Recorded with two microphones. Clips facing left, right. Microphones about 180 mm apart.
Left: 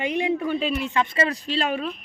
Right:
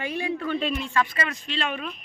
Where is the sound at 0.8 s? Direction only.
20° left (ahead or behind).